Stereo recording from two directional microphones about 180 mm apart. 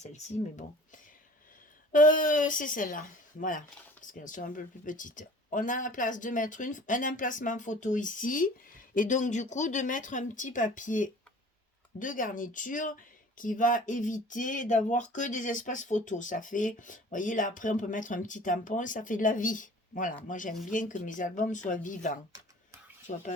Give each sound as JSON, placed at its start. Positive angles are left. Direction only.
{"t": 0.0, "sound": "speech", "side_deg": 40}
{"t": 1.9, "sound": "speech", "side_deg": 50}
{"t": 4.0, "sound": "speech", "side_deg": 45}